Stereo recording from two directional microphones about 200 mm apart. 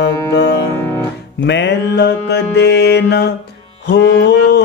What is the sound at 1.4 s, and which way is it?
Music, 60° left (ahead or behind).